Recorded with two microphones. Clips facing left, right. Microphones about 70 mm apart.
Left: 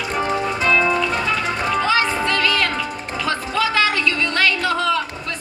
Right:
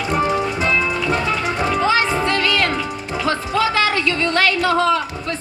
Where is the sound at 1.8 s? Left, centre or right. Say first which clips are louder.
Right 2 dB; right.